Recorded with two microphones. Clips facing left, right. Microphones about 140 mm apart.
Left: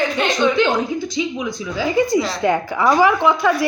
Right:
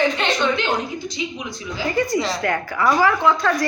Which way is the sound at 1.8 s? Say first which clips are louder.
Left 3 dB; 10° left (ahead or behind).